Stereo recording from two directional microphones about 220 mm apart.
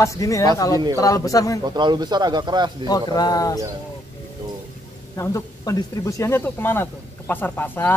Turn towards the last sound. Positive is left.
turn(degrees=10)  # may be behind; listen again after turning